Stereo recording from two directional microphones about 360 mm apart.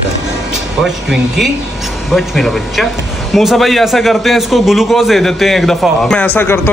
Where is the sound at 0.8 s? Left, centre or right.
Centre.